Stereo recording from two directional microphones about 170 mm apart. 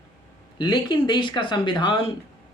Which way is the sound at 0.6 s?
25° left (ahead or behind).